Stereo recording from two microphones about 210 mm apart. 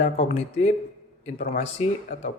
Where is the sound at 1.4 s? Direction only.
35° left (ahead or behind).